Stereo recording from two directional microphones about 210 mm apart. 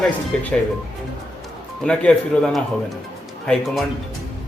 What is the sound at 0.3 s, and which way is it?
Speech, 5° left (ahead or behind).